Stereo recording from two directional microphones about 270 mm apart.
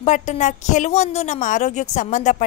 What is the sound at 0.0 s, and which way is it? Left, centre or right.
A woman's voice, left.